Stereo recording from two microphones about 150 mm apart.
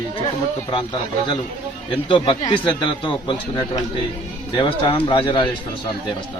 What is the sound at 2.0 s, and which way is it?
Speech, 30° left (ahead or behind).